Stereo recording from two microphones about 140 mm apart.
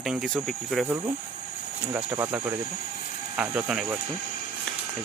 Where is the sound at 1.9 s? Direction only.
10° right (ahead or behind).